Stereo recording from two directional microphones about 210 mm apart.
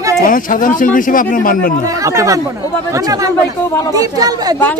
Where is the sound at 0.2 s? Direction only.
40° left (ahead or behind).